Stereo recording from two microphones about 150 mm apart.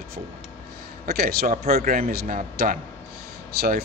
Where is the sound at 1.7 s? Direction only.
75° right (ahead or behind).